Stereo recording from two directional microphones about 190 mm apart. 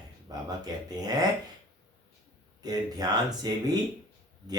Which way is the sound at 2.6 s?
20° right (ahead or behind).